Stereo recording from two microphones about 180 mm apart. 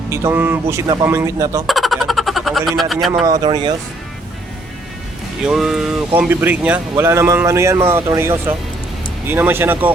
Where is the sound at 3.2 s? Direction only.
20° right (ahead or behind).